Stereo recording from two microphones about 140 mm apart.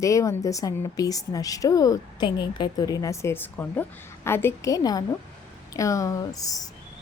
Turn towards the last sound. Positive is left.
turn(degrees=25)  # may be behind; listen again after turning